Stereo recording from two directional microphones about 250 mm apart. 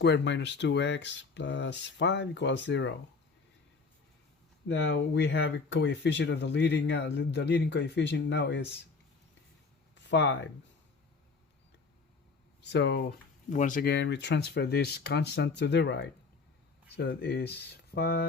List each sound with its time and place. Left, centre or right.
0.0 s speech: left
4.7 s speech: left
9.9 s a sound: left
12.6 s speech: left